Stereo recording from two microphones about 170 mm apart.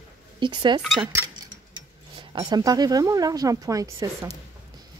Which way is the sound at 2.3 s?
25° right (ahead or behind).